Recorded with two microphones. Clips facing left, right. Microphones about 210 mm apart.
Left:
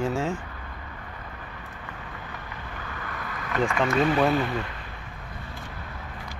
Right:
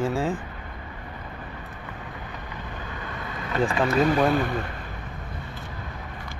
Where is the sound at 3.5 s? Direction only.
30° right (ahead or behind).